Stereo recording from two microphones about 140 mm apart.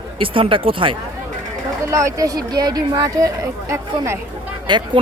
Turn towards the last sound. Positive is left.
turn(degrees=-35)  # may be behind; listen again after turning